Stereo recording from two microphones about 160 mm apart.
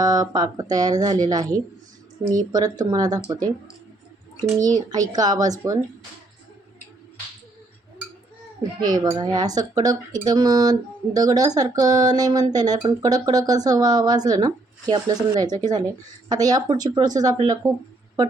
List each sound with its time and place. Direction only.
0.0 s speech: 20° right (ahead or behind)
8.9 s speech: 20° right (ahead or behind)